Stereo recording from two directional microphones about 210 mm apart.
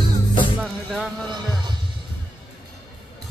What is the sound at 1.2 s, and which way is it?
Music, 20° right (ahead or behind).